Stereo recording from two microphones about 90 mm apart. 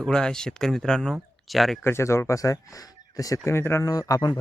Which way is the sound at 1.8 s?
30° left (ahead or behind).